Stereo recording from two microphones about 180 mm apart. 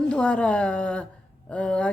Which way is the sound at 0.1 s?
5° left (ahead or behind).